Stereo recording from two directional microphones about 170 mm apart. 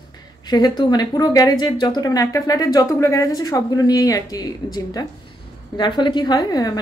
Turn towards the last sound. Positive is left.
turn(degrees=20)  # may be behind; listen again after turning